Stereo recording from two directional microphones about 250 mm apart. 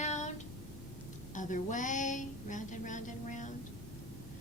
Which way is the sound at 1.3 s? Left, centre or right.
Left.